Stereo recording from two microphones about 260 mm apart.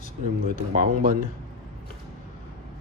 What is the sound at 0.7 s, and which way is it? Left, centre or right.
Speech, right.